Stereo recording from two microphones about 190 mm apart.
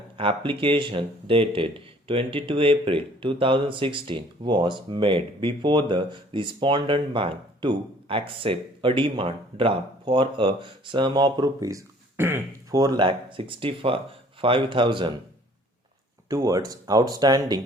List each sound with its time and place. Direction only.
0.2 s speech: 25° right (ahead or behind)
16.3 s speech: 20° right (ahead or behind)